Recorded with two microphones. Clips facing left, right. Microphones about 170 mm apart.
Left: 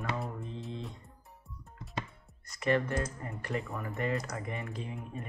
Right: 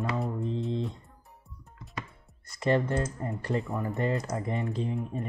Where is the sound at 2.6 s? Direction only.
30° right (ahead or behind).